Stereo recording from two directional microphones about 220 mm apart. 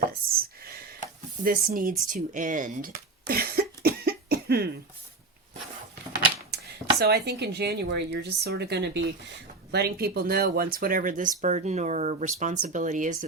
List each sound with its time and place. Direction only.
0.3 s a sound: 45° right (ahead or behind)
1.5 s speech: 40° right (ahead or behind)
2.0 s cough: 35° right (ahead or behind)
6.5 s chopping: 50° right (ahead or behind)
7.0 s a woman's voice: 50° right (ahead or behind)